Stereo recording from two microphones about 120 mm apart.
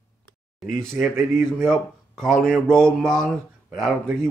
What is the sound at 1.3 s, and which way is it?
Speech, 5° left (ahead or behind).